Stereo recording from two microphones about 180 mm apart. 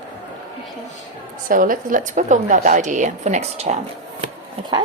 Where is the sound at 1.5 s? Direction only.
50° right (ahead or behind); by 4.7 s 30° right (ahead or behind).